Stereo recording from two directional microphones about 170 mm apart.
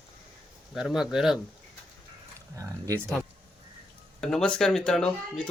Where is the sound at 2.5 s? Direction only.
20° right (ahead or behind).